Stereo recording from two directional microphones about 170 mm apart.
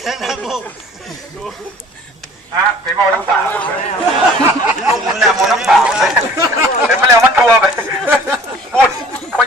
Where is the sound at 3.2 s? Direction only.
10° left (ahead or behind).